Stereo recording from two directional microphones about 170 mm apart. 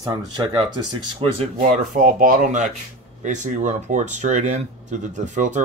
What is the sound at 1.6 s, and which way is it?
Speech, 55° right (ahead or behind).